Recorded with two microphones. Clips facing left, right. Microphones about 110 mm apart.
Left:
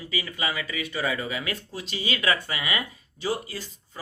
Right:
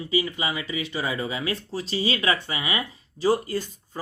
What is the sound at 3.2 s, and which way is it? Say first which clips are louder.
Speech: right 7 dB; 40° right (ahead or behind).